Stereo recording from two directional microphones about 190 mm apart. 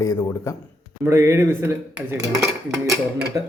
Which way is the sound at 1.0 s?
15° right (ahead or behind).